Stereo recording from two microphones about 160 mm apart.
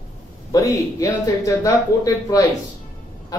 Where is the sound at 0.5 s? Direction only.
20° left (ahead or behind).